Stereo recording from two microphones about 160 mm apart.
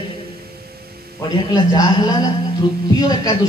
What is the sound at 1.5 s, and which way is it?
Speech, 20° left (ahead or behind).